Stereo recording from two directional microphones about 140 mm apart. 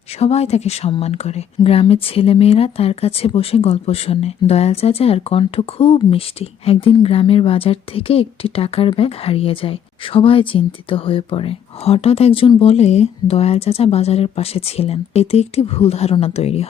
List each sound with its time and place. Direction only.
0.2 s speech: 45° left (ahead or behind)